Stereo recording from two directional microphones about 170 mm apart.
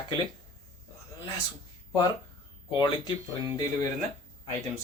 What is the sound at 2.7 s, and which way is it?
Speech, 25° left (ahead or behind).